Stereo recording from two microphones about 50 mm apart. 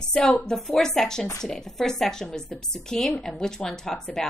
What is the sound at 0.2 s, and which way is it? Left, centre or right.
A woman's voice, centre.